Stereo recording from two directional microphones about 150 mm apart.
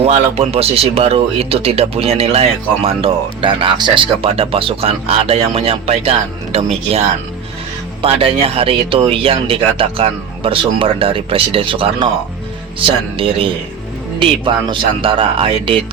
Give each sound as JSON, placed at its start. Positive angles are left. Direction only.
{"t": 0.0, "sound": "speech", "side_deg": -45}